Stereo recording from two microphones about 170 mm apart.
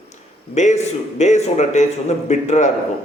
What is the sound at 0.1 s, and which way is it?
A man's voice, 40° left (ahead or behind).